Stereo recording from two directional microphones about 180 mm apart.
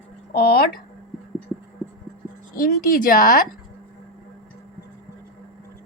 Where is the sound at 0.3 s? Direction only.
60° left (ahead or behind).